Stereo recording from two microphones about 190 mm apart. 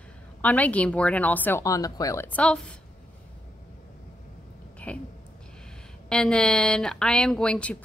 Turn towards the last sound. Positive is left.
turn(degrees=5)  # may be behind; listen again after turning